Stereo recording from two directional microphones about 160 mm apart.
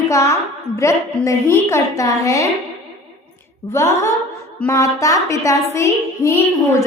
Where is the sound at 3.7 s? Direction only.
15° left (ahead or behind).